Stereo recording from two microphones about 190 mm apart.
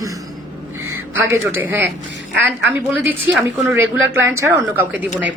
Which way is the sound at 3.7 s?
10° right (ahead or behind).